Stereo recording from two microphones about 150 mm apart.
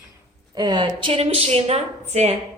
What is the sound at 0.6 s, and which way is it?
A woman's voice, 30° right (ahead or behind).